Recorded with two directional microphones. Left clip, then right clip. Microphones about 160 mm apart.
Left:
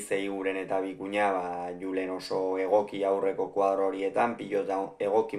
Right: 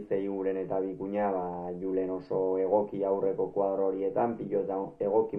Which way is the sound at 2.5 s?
25° left (ahead or behind).